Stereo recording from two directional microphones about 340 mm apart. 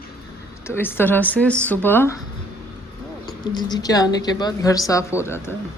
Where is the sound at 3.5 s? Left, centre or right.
Centre.